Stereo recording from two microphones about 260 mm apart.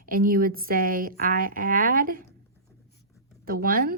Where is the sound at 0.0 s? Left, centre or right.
Right.